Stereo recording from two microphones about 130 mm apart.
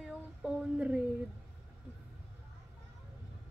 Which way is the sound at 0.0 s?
5° right (ahead or behind).